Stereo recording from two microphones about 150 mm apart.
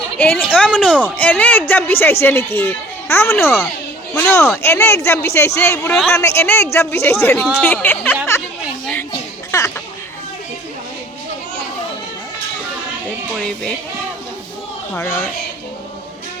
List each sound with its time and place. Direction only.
0.2 s a woman's voice: 10° left (ahead or behind)
9.5 s a sound: 20° left (ahead or behind)
14.9 s a woman's voice: 15° left (ahead or behind)